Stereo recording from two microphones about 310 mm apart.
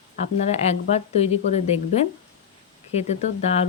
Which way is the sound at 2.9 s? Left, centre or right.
Left.